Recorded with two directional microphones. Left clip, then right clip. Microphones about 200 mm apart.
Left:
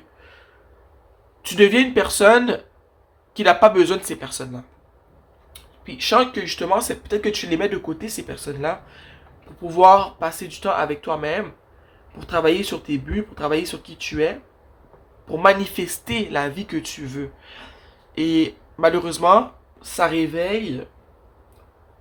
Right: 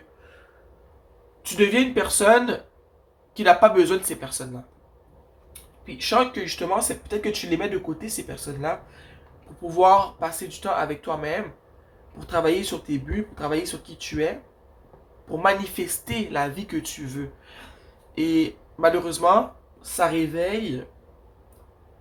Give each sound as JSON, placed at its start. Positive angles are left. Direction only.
{"t": 1.4, "sound": "speech", "side_deg": 40}
{"t": 5.8, "sound": "speech", "side_deg": 40}